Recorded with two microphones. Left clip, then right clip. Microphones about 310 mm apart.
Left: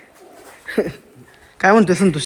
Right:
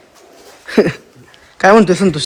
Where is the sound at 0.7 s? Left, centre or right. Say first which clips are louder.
Right 8 dB; right.